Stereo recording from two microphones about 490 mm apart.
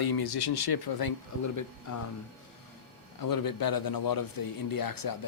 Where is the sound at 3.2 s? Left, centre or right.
Left.